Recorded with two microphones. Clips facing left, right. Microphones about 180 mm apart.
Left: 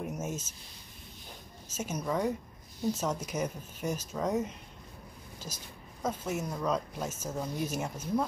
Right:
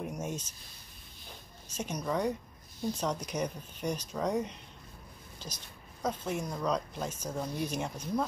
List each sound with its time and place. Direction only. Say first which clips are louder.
0.0 s a sound: left 1 dB; 5° left (ahead or behind)
1.7 s speech: left 1 dB; 5° left (ahead or behind)
6.0 s speech: even; 5° left (ahead or behind)